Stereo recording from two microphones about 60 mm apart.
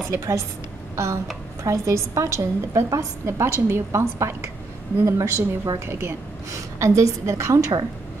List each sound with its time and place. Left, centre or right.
0.1 s a woman's voice: right